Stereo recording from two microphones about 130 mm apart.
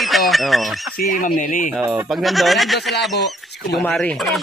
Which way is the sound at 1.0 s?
80° left.